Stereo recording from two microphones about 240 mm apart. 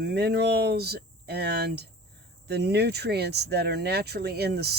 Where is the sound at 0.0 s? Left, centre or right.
Right.